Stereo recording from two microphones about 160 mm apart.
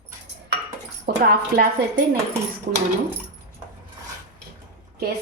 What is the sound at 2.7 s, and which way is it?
Speech, 55° right (ahead or behind).